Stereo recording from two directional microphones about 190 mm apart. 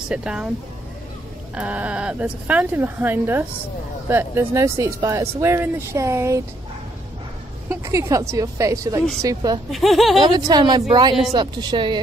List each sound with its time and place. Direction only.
0.1 s speech: 5° right (ahead or behind)
1.5 s speech: 5° right (ahead or behind)
7.7 s a woman's voice: 15° right (ahead or behind)
9.7 s speech: centre (ahead or behind)
10.2 s a woman's voice: 20° right (ahead or behind)